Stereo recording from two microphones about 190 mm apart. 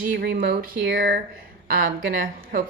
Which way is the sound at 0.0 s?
50° right (ahead or behind).